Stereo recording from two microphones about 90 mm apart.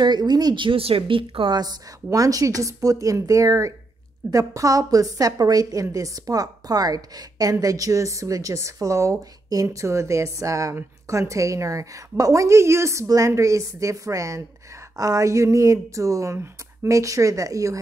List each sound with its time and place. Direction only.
0.0 s speech: 50° right (ahead or behind)
0.7 s a woman's voice: 90° right; by 1.6 s 70° right (ahead or behind)
1.6 s speech: 40° right (ahead or behind)